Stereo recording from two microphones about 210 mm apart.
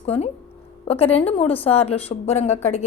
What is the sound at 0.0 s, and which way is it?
Speech, 30° left (ahead or behind).